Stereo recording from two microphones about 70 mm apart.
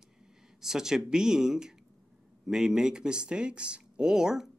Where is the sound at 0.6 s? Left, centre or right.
Centre.